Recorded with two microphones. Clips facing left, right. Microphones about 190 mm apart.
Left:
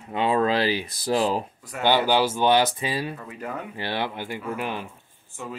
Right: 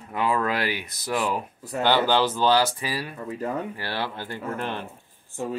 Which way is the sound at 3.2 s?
35° right (ahead or behind).